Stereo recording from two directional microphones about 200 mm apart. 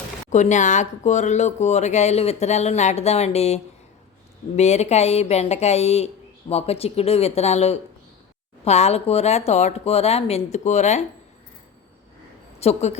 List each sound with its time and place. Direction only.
0.3 s speech: 35° left (ahead or behind)
12.5 s a woman's voice: 35° left (ahead or behind)